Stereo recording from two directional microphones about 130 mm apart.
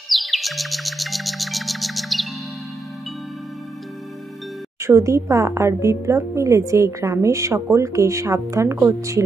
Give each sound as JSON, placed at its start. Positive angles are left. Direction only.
{"t": 0.1, "sound": "music", "side_deg": 0}
{"t": 4.8, "sound": "a woman's voice", "side_deg": -25}